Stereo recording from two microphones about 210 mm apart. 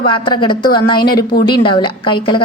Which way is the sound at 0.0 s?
25° left (ahead or behind).